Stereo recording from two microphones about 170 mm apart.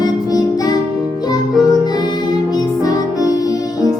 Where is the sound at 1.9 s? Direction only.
25° left (ahead or behind).